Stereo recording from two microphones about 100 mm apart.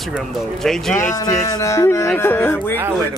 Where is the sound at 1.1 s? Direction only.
40° left (ahead or behind).